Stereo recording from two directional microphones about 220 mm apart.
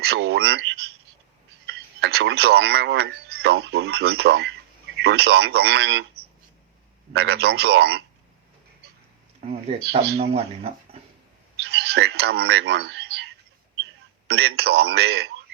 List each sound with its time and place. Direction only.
0.0 s a man's voice: 50° right (ahead or behind)
7.1 s a man's voice: 50° right (ahead or behind)
9.5 s speech: 25° right (ahead or behind)
11.6 s a sound: 50° right (ahead or behind)
14.3 s a man's voice: 50° right (ahead or behind)